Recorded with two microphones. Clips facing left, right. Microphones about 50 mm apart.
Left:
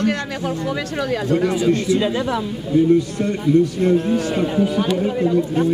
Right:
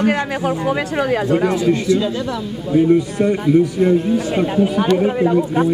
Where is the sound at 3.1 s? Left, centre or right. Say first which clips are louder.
Right 3 dB; centre.